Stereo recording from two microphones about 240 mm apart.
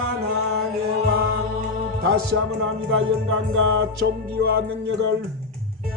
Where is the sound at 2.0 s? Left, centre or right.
Right.